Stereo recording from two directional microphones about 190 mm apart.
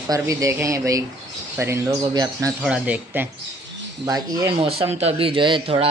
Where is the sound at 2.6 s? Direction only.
10° right (ahead or behind).